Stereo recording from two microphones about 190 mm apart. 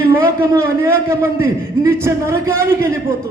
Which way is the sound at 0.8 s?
10° right (ahead or behind).